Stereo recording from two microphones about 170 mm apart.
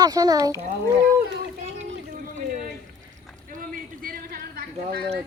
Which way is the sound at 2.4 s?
50° right (ahead or behind).